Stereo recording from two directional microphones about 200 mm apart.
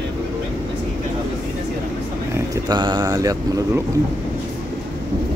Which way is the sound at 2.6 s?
20° right (ahead or behind).